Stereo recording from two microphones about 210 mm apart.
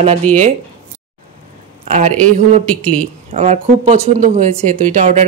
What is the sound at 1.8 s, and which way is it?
Speech, 35° right (ahead or behind).